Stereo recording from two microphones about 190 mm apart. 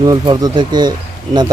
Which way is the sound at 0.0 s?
20° right (ahead or behind).